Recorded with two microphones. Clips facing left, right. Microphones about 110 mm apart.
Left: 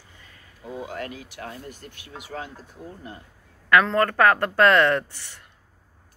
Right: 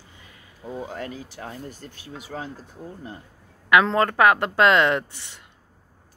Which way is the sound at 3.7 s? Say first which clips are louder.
Right 1 dB; 20° right (ahead or behind).